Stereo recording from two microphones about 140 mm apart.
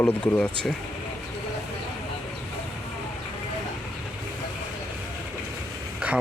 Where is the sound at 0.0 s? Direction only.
10° left (ahead or behind).